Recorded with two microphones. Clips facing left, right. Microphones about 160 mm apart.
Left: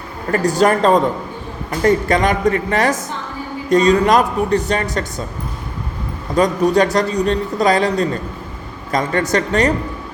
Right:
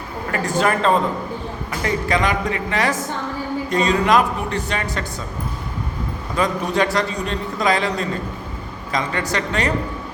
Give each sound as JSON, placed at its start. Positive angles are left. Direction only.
{"t": 0.3, "sound": "a man's voice", "side_deg": 40}
{"t": 6.3, "sound": "a man's voice", "side_deg": 40}